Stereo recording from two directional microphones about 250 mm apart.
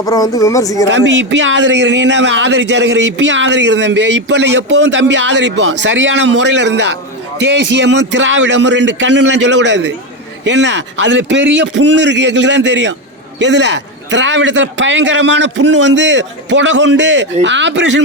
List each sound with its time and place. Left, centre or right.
0.0 s speech: centre
0.9 s speech: right